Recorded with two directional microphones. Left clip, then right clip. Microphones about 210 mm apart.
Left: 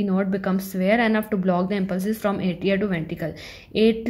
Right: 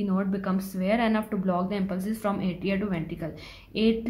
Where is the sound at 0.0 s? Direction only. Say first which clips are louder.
Left 5 dB; 25° left (ahead or behind).